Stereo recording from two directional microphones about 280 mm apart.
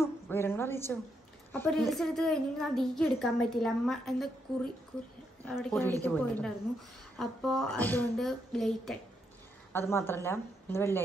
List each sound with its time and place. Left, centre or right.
0.0 s a sound: centre
1.5 s a woman's voice: centre
5.4 s a woman's voice: centre